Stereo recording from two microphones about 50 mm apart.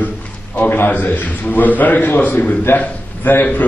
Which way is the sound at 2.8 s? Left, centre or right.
Left.